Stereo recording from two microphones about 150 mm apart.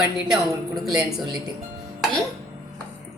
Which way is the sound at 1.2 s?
30° right (ahead or behind).